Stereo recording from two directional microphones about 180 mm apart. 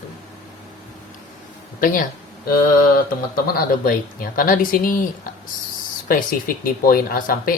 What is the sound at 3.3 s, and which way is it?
Speech, 55° left (ahead or behind).